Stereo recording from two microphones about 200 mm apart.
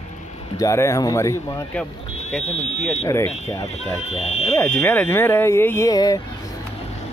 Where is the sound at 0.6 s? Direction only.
15° left (ahead or behind).